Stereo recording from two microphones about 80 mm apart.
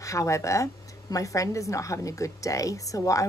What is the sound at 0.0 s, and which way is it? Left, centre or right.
A woman's voice, left.